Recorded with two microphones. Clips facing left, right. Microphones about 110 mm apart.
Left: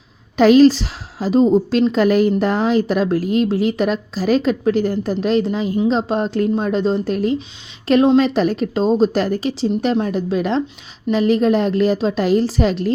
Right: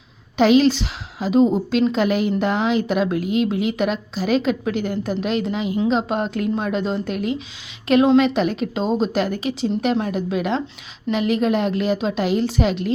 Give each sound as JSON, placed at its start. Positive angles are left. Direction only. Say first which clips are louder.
{"t": 0.3, "sound": "a woman's voice", "louder": "left 5 dB", "side_deg": 40}